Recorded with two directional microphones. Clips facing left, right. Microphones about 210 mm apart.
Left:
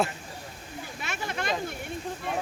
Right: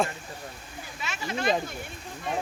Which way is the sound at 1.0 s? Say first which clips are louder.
Right 1 dB; 55° left (ahead or behind).